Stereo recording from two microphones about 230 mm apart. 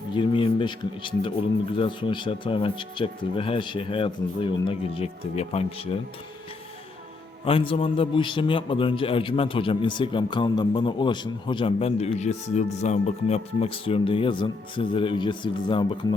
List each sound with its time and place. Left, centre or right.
0.1 s a man's voice: left
7.4 s a man's voice: left